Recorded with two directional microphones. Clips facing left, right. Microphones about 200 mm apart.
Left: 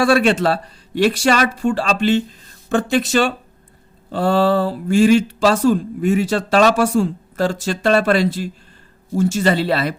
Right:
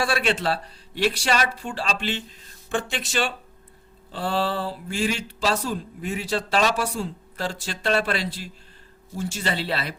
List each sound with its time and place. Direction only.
0.0 s speech: 45° left (ahead or behind)